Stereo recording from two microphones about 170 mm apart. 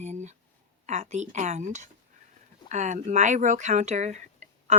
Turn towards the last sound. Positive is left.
turn(degrees=-45)  # may be behind; listen again after turning